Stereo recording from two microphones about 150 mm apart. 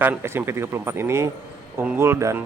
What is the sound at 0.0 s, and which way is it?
Speech, 15° right (ahead or behind).